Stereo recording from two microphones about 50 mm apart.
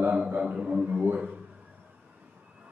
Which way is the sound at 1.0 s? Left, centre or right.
Right.